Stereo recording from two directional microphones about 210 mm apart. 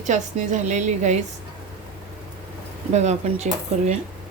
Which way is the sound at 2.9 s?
30° right (ahead or behind).